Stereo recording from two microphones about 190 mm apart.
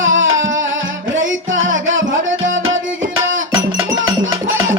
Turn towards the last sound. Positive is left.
turn(degrees=-85)